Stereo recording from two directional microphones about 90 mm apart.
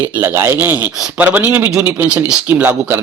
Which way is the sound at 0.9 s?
5° right (ahead or behind).